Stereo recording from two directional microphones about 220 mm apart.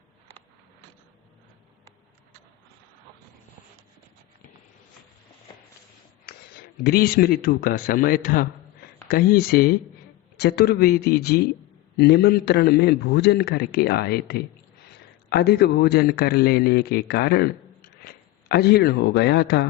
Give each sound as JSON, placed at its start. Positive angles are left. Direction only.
{"t": 6.2, "sound": "a man's voice", "side_deg": 45}